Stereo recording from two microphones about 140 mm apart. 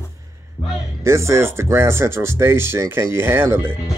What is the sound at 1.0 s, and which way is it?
Speech, 20° right (ahead or behind).